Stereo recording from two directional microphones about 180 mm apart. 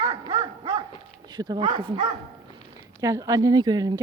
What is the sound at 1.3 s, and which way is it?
Speech, 20° right (ahead or behind).